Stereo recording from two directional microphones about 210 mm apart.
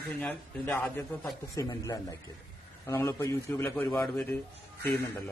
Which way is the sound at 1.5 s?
15° left (ahead or behind).